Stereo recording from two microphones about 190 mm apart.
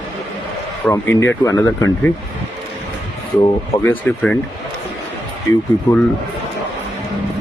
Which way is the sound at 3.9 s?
5° left (ahead or behind).